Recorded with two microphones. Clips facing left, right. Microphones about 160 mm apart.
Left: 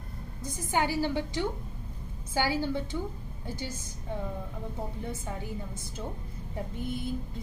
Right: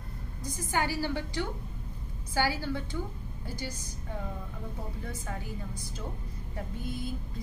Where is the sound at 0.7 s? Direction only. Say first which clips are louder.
Left 3 dB; 20° left (ahead or behind).